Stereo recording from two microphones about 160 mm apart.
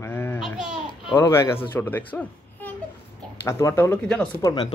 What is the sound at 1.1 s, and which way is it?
Speech, 15° left (ahead or behind).